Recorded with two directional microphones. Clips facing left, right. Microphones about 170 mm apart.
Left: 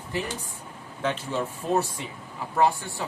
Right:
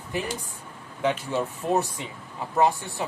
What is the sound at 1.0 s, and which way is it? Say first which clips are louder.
Speech: right 2 dB; 15° right (ahead or behind).